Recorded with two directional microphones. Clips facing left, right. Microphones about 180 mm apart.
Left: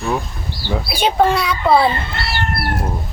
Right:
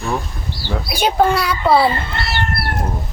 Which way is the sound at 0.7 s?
Centre (ahead or behind).